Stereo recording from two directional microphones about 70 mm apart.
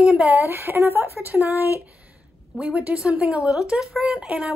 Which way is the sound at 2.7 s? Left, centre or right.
Right.